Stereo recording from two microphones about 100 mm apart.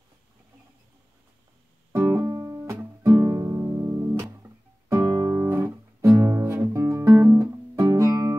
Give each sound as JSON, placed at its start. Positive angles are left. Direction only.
{"t": 2.0, "sound": "music", "side_deg": -15}
{"t": 2.2, "sound": "music", "side_deg": -35}
{"t": 5.1, "sound": "guitar", "side_deg": -40}
{"t": 5.4, "sound": "music", "side_deg": -25}
{"t": 5.9, "sound": "guitar", "side_deg": -35}